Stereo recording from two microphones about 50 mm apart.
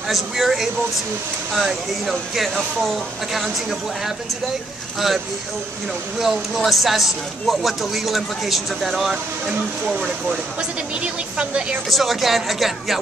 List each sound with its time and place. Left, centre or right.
0.1 s speech: centre
6.1 s speech: centre
11.0 s speech: right
11.9 s speech: centre